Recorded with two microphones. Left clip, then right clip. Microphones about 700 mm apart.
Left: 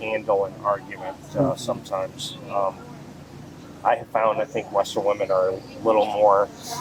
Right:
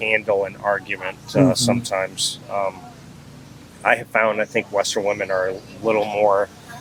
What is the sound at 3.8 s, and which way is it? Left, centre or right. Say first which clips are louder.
Speech: right 3 dB; centre.